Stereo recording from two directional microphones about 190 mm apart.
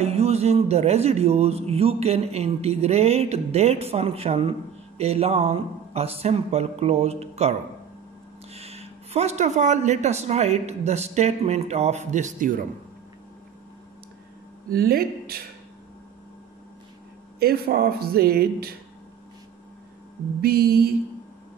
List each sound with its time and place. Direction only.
0.0 s speech: 35° right (ahead or behind)
8.5 s speech: 35° right (ahead or behind)
14.7 s speech: 55° right (ahead or behind)
17.4 s speech: 55° right (ahead or behind)
20.4 s speech: 55° right (ahead or behind)